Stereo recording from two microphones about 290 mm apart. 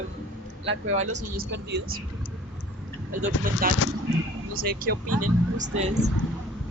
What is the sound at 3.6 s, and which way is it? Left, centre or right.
A man's voice, right.